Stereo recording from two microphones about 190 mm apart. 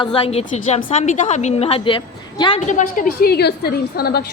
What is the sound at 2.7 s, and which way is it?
A woman's voice, 40° left (ahead or behind).